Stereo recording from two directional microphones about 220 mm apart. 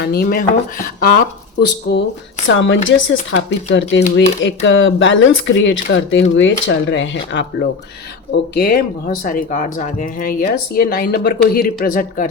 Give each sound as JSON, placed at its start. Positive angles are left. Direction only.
{"t": 0.0, "sound": "speech", "side_deg": 45}
{"t": 8.5, "sound": "speech", "side_deg": 45}